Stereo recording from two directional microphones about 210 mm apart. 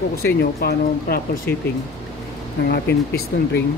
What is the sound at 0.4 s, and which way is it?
Speech, 50° left (ahead or behind).